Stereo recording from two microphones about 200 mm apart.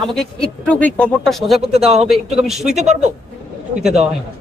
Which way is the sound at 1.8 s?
30° right (ahead or behind).